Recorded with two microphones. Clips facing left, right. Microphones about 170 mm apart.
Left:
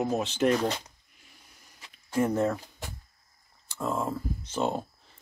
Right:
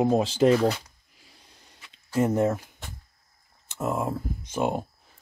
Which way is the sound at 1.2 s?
30° right (ahead or behind).